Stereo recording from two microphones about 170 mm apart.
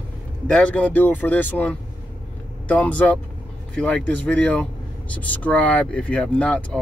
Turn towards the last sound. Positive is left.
turn(degrees=5)  # may be behind; listen again after turning